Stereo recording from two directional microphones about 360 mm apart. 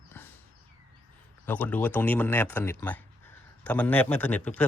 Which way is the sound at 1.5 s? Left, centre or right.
Centre.